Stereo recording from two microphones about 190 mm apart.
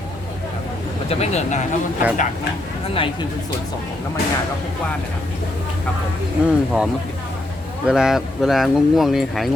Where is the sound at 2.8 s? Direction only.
30° left (ahead or behind).